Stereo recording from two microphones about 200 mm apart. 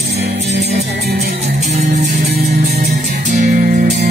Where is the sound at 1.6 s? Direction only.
40° right (ahead or behind).